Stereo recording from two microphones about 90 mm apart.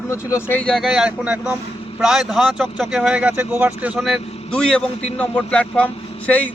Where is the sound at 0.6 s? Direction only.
Centre (ahead or behind); by 3.9 s 20° right (ahead or behind).